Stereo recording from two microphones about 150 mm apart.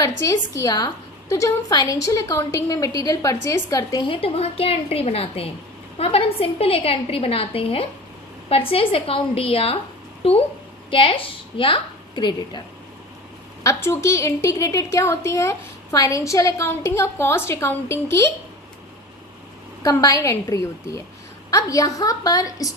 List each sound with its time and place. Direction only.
0.2 s a woman's voice: 20° left (ahead or behind)
4.0 s a woman's voice: 40° left (ahead or behind)
13.7 s a woman's voice: 20° left (ahead or behind)
19.8 s a woman's voice: 20° left (ahead or behind)